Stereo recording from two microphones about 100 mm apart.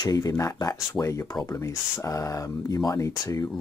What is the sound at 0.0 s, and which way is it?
Speech, 40° left (ahead or behind).